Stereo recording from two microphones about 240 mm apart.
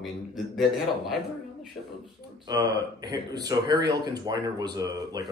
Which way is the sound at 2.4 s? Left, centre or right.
Centre.